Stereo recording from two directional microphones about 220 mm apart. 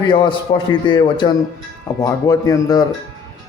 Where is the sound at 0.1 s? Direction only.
20° left (ahead or behind).